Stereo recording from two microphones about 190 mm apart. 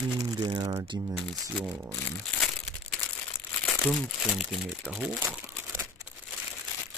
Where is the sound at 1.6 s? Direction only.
10° right (ahead or behind).